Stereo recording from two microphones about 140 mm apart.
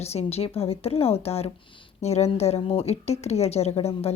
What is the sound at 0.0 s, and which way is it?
A woman's voice, 50° left (ahead or behind).